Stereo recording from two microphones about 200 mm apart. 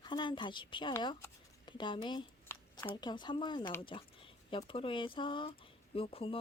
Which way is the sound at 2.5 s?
15° left (ahead or behind).